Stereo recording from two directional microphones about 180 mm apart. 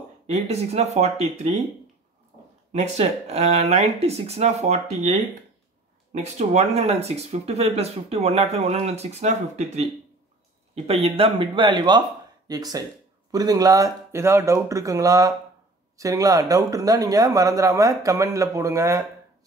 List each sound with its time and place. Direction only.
0.3 s speech: 35° right (ahead or behind)
2.7 s speech: 40° right (ahead or behind)
6.1 s speech: 40° right (ahead or behind); by 19.0 s 15° right (ahead or behind)